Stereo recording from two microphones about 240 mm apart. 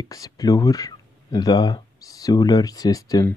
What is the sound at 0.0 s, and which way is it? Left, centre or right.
Speech, centre.